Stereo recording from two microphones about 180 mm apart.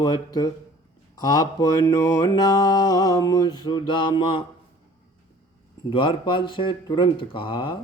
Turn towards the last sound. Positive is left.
turn(degrees=25)  # may be behind; listen again after turning